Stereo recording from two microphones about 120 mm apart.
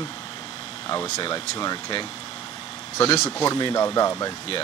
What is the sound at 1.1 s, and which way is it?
Speech, 35° left (ahead or behind).